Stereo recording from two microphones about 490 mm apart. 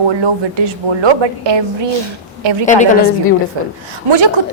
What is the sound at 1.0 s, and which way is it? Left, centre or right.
Speech, right.